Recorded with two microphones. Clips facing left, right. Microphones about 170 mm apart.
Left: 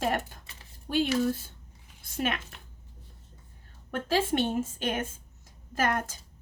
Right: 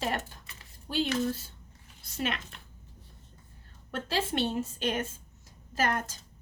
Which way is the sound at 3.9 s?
50° left (ahead or behind).